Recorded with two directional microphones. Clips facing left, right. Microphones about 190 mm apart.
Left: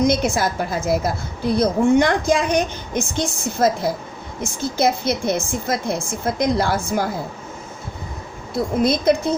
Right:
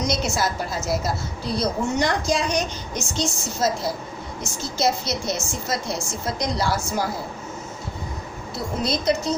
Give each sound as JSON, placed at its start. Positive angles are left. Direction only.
{"t": 0.0, "sound": "a woman's voice", "side_deg": 55}
{"t": 8.5, "sound": "a woman's voice", "side_deg": 50}